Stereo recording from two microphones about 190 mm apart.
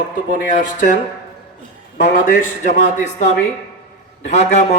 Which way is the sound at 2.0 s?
45° left (ahead or behind).